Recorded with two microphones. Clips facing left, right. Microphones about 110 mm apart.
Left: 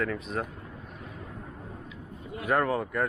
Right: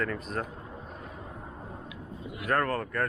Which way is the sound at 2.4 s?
10° left (ahead or behind).